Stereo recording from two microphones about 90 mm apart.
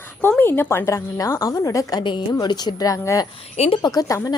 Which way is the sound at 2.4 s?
55° left (ahead or behind).